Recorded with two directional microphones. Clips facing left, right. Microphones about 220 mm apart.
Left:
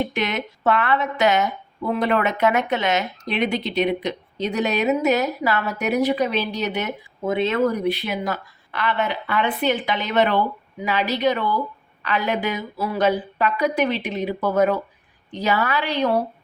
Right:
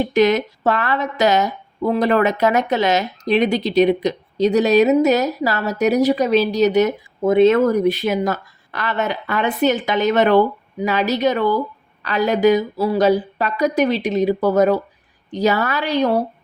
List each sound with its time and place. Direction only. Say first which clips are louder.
0.1 s speech: right 10 dB; 40° right (ahead or behind)